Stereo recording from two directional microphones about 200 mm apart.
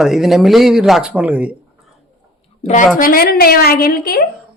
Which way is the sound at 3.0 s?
45° left (ahead or behind).